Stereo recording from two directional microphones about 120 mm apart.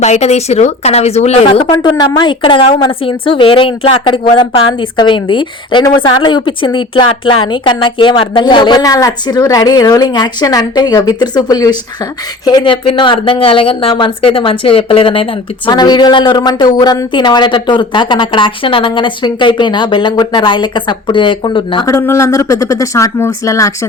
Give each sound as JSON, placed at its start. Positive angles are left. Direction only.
{"t": 0.0, "sound": "speech", "side_deg": 70}
{"t": 1.7, "sound": "a woman's voice", "side_deg": 40}
{"t": 21.8, "sound": "speech", "side_deg": 25}